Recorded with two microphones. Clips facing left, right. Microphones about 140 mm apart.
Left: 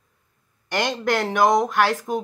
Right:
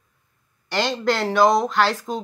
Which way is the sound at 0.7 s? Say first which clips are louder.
Right 1 dB; 15° left (ahead or behind).